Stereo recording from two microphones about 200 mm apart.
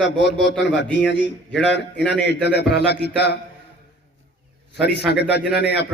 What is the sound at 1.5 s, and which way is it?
A man's voice, 60° left (ahead or behind).